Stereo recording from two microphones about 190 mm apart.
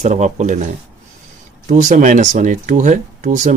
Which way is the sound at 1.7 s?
40° right (ahead or behind).